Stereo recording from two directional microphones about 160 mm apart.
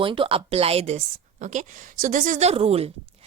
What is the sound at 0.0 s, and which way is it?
A woman's voice, 35° right (ahead or behind).